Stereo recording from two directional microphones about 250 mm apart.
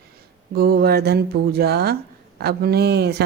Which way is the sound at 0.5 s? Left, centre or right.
Right.